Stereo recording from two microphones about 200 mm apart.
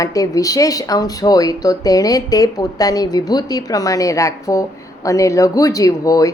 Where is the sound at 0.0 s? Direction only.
15° left (ahead or behind).